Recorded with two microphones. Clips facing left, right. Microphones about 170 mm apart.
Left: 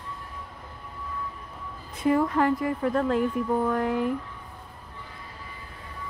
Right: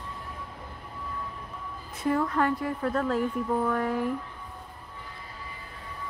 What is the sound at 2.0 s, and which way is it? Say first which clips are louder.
Speech: left 3 dB; 10° left (ahead or behind).